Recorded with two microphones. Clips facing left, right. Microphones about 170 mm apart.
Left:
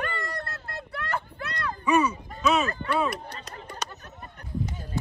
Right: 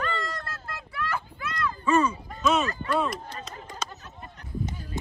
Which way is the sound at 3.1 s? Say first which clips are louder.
Left 1 dB; 65° left (ahead or behind).